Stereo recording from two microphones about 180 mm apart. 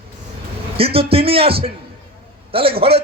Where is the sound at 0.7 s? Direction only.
30° right (ahead or behind).